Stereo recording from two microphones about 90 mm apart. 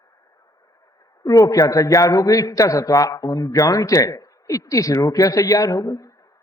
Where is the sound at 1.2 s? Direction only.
40° left (ahead or behind).